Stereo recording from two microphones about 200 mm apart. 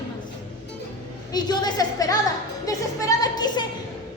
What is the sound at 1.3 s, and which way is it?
Speech, 20° left (ahead or behind).